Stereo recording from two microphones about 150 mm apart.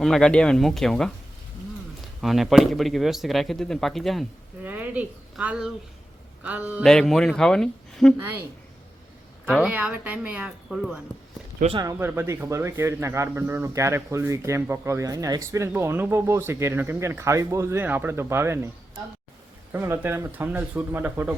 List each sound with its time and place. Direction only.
0.0 s speech: 5° left (ahead or behind)
4.6 s speech: 10° right (ahead or behind)
6.8 s speech: centre (ahead or behind)
8.2 s speech: 15° right (ahead or behind)
9.5 s speech: 5° right (ahead or behind)
11.7 s speech: 25° right (ahead or behind)
11.9 s speech: 15° right (ahead or behind)
19.7 s speech: 15° right (ahead or behind)